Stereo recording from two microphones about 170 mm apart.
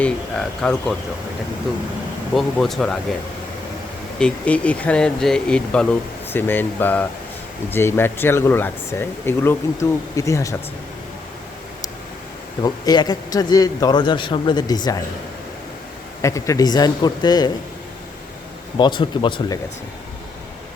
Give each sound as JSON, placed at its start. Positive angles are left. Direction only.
{"t": 0.0, "sound": "speech", "side_deg": 5}
{"t": 2.3, "sound": "speech", "side_deg": 0}
{"t": 4.2, "sound": "speech", "side_deg": 5}
{"t": 12.6, "sound": "a man's voice", "side_deg": 25}
{"t": 16.2, "sound": "a man's voice", "side_deg": 20}
{"t": 18.8, "sound": "a man's voice", "side_deg": 30}